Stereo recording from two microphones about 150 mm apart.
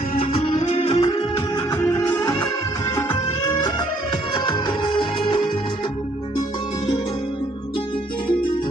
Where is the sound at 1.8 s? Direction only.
20° left (ahead or behind).